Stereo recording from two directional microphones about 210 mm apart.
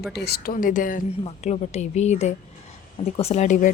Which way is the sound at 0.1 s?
50° left (ahead or behind).